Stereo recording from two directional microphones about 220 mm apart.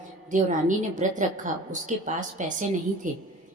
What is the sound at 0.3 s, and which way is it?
Speech, 35° right (ahead or behind).